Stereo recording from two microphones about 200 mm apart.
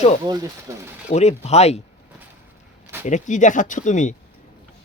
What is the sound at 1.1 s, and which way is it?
Speech, 35° left (ahead or behind).